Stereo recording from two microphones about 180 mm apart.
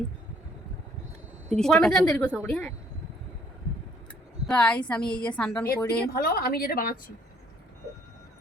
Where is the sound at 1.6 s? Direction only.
5° left (ahead or behind).